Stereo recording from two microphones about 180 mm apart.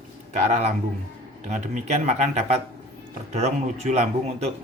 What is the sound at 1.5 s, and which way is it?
A man's voice, 40° right (ahead or behind).